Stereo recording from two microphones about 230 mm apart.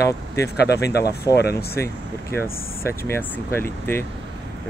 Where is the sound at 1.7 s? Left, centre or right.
Centre.